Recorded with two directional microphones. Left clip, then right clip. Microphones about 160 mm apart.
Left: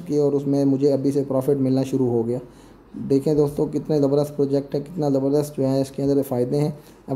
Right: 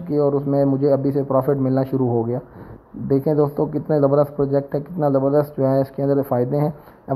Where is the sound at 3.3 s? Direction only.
5° right (ahead or behind).